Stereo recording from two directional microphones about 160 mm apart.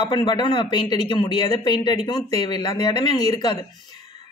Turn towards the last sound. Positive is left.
turn(degrees=25)  # may be behind; listen again after turning